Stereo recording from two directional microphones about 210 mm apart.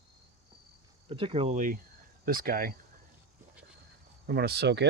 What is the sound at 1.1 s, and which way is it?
Speech, 25° right (ahead or behind).